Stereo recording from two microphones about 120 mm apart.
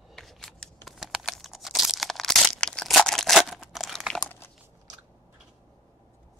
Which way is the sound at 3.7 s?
Centre (ahead or behind).